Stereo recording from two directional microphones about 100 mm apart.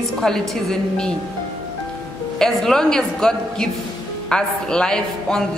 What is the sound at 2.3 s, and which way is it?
A woman's voice, 5° left (ahead or behind).